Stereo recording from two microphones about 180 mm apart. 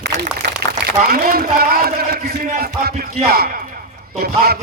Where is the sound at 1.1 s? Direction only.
55° right (ahead or behind).